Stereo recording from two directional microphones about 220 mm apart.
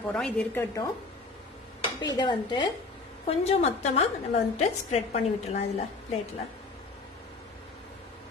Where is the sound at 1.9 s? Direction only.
20° left (ahead or behind).